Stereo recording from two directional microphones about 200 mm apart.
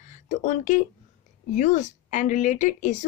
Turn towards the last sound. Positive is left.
turn(degrees=40)  # may be behind; listen again after turning